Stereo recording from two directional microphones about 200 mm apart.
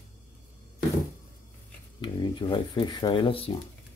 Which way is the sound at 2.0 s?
25° left (ahead or behind).